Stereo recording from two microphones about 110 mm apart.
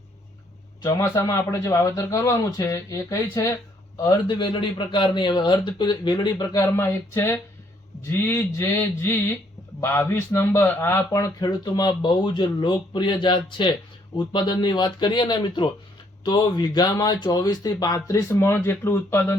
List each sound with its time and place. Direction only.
0.8 s a man's voice: 30° left (ahead or behind)
3.9 s a man's voice: 40° left (ahead or behind)
6.6 s a man's voice: 25° left (ahead or behind)
11.3 s a man's voice: 40° left (ahead or behind); by 19.4 s 20° left (ahead or behind)